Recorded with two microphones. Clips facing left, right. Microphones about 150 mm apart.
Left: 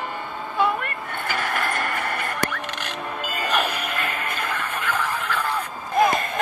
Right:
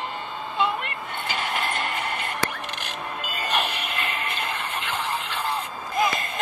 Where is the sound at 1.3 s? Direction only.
55° left (ahead or behind).